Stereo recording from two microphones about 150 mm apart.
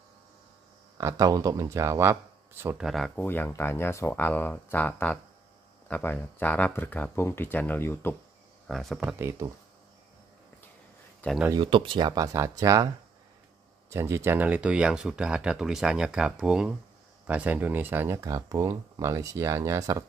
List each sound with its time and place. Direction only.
0.9 s speech: 20° right (ahead or behind)
2.8 s speech: centre (ahead or behind)
3.2 s speech: 15° left (ahead or behind)
8.6 s speech: centre (ahead or behind)
9.0 s speech: 15° right (ahead or behind)
11.5 s speech: 35° right (ahead or behind)